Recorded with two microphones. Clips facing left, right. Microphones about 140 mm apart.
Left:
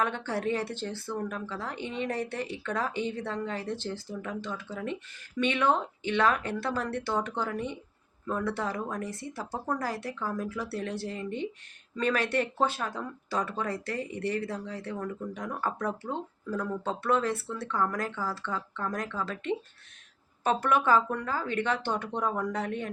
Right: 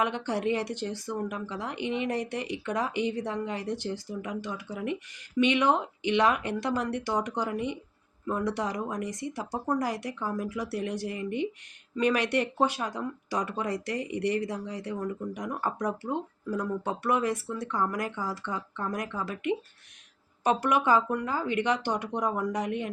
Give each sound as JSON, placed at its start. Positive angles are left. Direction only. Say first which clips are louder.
{"t": 0.0, "sound": "speech", "louder": "right 2 dB", "side_deg": -15}